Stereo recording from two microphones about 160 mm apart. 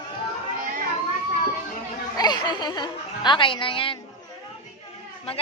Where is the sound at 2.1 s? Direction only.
25° left (ahead or behind).